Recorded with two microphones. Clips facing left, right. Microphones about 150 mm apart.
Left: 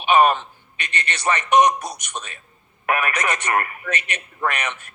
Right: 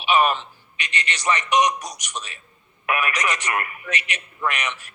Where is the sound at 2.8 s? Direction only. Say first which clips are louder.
Left 2 dB; 40° left (ahead or behind).